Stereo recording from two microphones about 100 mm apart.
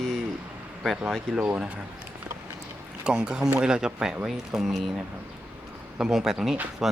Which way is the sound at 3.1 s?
10° right (ahead or behind).